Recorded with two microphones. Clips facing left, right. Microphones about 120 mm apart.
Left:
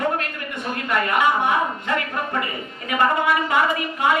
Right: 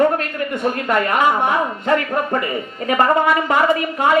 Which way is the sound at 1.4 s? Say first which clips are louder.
Right 4 dB; 40° right (ahead or behind).